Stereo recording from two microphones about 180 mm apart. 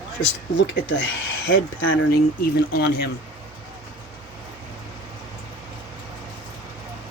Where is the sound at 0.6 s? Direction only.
85° left; by 3.1 s 60° left (ahead or behind).